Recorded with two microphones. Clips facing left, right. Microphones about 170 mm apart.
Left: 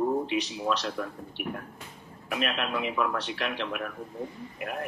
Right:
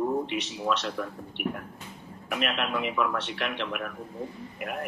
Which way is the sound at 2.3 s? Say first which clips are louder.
Right 1 dB; 35° left (ahead or behind).